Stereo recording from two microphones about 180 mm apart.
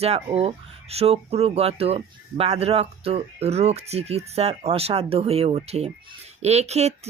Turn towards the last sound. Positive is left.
turn(degrees=-35)  # may be behind; listen again after turning